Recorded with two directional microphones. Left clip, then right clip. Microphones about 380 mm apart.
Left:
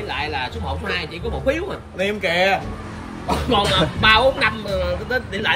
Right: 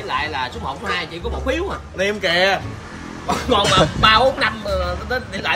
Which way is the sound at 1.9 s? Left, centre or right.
Centre.